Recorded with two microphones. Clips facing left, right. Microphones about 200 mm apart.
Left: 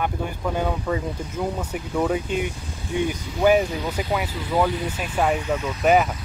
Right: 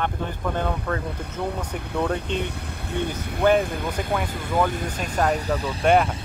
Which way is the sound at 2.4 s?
60° right (ahead or behind).